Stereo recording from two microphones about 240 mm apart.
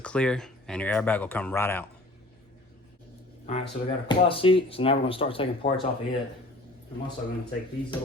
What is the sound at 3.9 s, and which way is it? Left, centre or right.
Speech, left.